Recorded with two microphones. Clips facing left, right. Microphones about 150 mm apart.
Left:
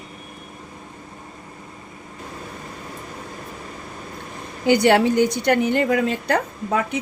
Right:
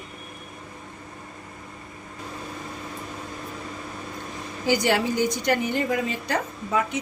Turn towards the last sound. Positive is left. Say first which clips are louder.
# left 5 dB
turn(degrees=60)  # may be behind; listen again after turning